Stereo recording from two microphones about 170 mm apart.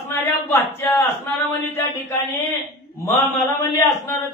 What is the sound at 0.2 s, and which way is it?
A man's voice, 15° left (ahead or behind).